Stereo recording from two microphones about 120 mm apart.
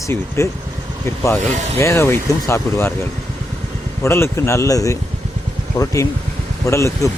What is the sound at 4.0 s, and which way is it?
Speech, 20° left (ahead or behind).